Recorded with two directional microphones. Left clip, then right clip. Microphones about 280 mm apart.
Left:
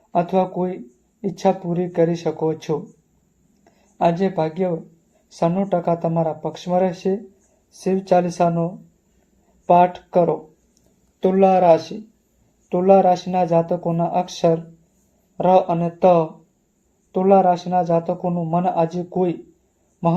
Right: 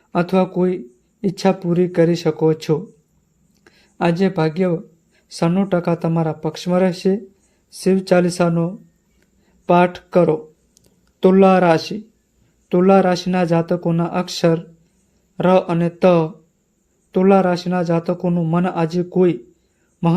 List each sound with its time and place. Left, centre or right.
0.2 s a man's voice: right
4.0 s a man's voice: right